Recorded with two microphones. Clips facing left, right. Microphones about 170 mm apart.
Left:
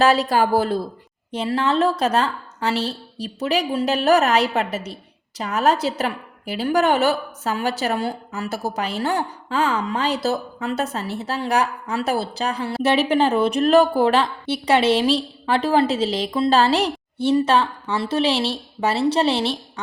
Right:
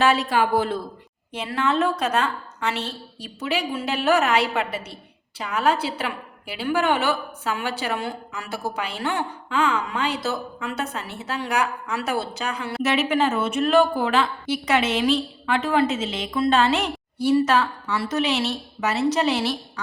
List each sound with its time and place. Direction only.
0.0 s a woman's voice: 35° left (ahead or behind)